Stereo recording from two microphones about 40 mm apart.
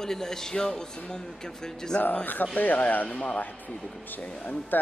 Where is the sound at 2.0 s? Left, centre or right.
Left.